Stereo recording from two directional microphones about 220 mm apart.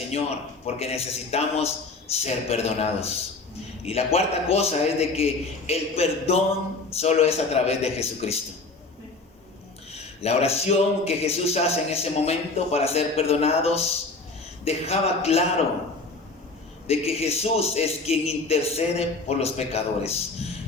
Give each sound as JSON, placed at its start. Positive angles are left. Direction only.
{"t": 0.1, "sound": "a man's voice", "side_deg": 30}
{"t": 9.9, "sound": "a man's voice", "side_deg": 30}
{"t": 16.8, "sound": "a man's voice", "side_deg": 25}